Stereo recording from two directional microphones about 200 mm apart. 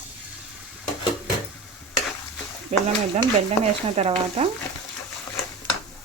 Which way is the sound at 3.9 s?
30° right (ahead or behind).